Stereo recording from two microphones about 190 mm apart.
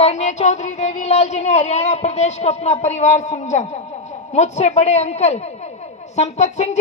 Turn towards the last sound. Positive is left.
turn(degrees=35)  # may be behind; listen again after turning